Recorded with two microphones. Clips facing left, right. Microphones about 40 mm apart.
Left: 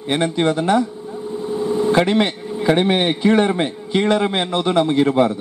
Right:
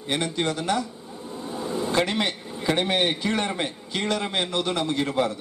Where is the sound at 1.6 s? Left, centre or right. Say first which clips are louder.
Left 8 dB; centre.